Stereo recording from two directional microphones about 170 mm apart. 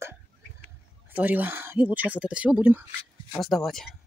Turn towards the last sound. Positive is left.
turn(degrees=0)  # may be behind; listen again after turning